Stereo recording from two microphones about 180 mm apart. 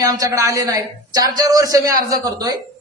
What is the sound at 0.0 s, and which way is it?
A man's voice, 20° right (ahead or behind).